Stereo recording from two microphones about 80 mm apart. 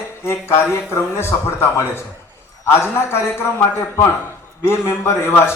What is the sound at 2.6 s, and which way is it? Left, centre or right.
Speech, left.